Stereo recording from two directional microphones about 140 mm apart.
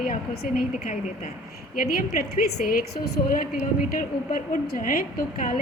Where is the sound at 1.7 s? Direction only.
85° left.